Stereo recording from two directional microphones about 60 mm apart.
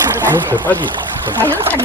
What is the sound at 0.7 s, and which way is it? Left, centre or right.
Speech, left.